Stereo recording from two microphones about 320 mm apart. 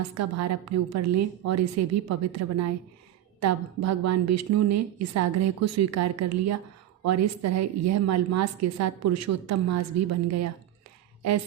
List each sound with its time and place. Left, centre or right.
0.1 s a woman's voice: right